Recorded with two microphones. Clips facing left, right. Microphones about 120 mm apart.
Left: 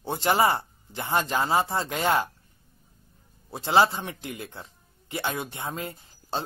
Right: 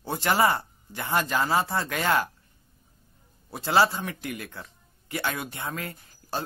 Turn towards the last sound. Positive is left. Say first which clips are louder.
# left 1 dB
turn(degrees=25)  # may be behind; listen again after turning